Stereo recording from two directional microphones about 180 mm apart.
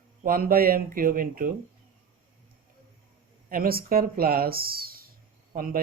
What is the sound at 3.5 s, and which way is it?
Speech, 55° right (ahead or behind).